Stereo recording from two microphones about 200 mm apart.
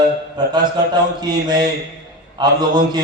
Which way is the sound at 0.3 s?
20° right (ahead or behind).